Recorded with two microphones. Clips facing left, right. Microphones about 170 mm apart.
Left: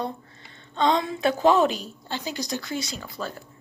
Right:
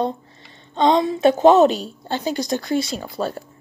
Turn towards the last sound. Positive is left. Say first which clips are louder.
# right 8 dB
turn(degrees=-30)  # may be behind; listen again after turning